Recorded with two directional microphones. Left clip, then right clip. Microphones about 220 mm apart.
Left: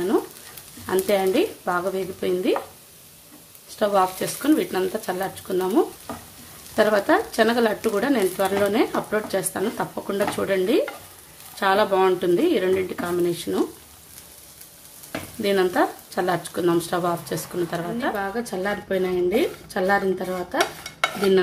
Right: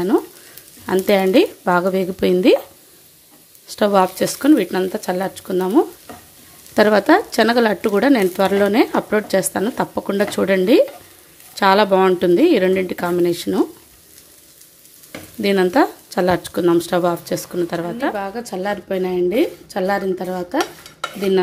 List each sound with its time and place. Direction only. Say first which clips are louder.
0.8 s speech: right 5 dB; 35° right (ahead or behind)
3.7 s speech: right 5 dB; 40° right (ahead or behind)
15.4 s speech: right 5 dB; 35° right (ahead or behind)